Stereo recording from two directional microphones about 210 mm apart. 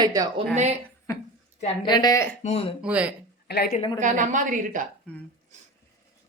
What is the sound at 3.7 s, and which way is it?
Speech, 30° left (ahead or behind).